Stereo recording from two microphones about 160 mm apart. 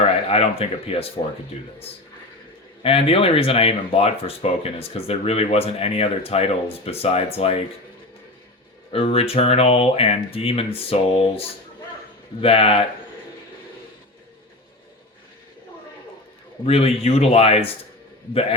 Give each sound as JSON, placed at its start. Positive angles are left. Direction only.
{"t": 0.3, "sound": "speech", "side_deg": 35}
{"t": 2.8, "sound": "speech", "side_deg": 35}
{"t": 8.9, "sound": "speech", "side_deg": 35}
{"t": 16.6, "sound": "speech", "side_deg": 40}